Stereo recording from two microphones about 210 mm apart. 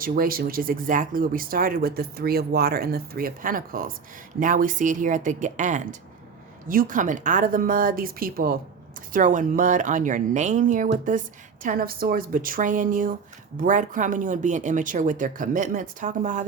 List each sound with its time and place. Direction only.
0.0 s speech: 45° right (ahead or behind)